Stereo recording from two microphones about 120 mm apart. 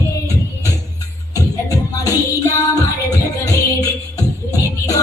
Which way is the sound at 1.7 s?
25° left (ahead or behind).